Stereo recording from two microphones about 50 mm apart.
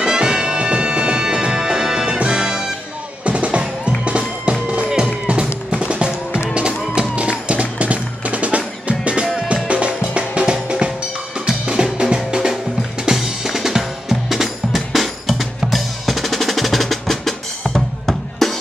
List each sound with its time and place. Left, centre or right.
0.0 s music: centre
13.0 s drum: centre